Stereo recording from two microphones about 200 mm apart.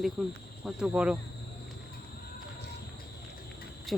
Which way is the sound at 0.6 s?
5° right (ahead or behind).